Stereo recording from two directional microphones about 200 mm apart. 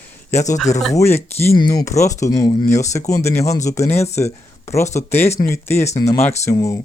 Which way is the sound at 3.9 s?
35° left (ahead or behind).